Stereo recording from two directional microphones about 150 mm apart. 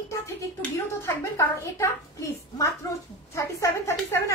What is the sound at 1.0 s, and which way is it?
Speech, 20° left (ahead or behind).